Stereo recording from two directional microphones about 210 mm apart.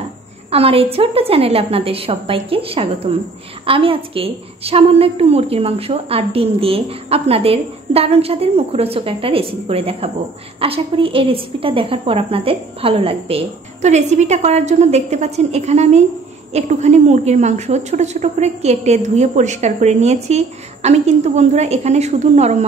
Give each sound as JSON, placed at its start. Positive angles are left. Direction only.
{"t": 0.5, "sound": "a woman's voice", "side_deg": -25}